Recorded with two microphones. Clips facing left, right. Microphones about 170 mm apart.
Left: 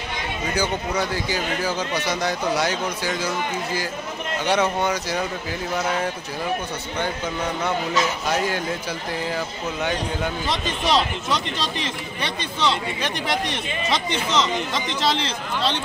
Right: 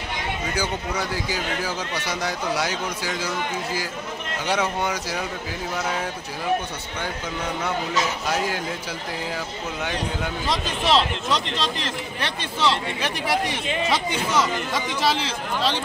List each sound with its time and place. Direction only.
0.6 s speech: 5° right (ahead or behind)
4.5 s speech: 5° right (ahead or behind)
10.5 s speech: centre (ahead or behind)